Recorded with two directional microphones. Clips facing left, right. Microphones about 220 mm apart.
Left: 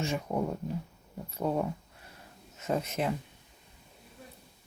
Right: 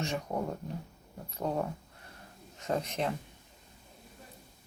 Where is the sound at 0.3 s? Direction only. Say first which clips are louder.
Left 3 dB; 5° left (ahead or behind).